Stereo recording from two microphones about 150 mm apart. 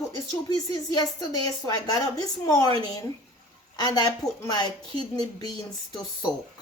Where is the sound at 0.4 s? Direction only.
25° left (ahead or behind).